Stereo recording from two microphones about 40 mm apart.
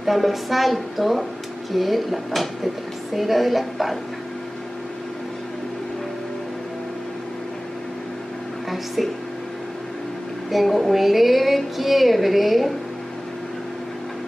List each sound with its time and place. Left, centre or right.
0.0 s a woman's voice: centre
8.6 s a woman's voice: centre
10.5 s a woman's voice: centre